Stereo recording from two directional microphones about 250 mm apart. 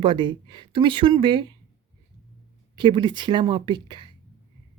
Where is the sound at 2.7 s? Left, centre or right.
Centre.